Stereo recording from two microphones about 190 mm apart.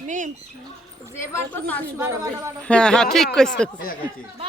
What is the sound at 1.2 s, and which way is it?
Speech, 10° left (ahead or behind).